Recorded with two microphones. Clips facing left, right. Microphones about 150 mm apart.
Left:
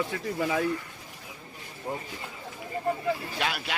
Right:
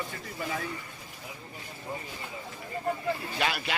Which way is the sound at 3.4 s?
Centre (ahead or behind).